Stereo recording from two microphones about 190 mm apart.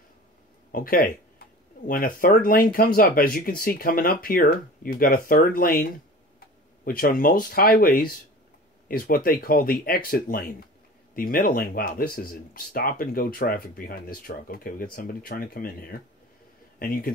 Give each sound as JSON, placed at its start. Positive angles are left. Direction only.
{"t": 0.7, "sound": "speech", "side_deg": 50}